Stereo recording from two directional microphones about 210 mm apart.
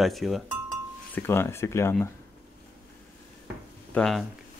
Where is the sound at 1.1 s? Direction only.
10° left (ahead or behind).